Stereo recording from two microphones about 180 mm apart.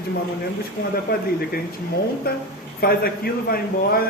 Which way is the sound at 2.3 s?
55° left (ahead or behind).